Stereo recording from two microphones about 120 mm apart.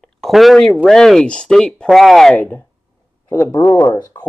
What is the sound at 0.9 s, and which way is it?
Speech, 5° left (ahead or behind).